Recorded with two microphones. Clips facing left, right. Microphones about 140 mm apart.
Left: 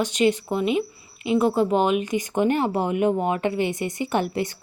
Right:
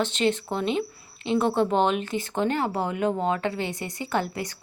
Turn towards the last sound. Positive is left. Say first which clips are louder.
# left 4 dB
turn(degrees=20)  # may be behind; listen again after turning